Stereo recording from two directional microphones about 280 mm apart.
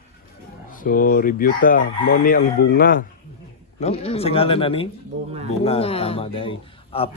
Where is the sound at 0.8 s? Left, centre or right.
Left.